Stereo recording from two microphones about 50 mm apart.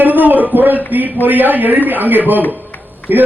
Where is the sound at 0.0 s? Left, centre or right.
Right.